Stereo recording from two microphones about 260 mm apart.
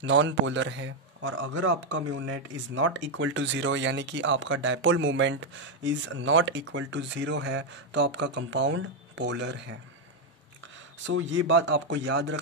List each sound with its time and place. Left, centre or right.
0.0 s speech: right
11.1 s speech: right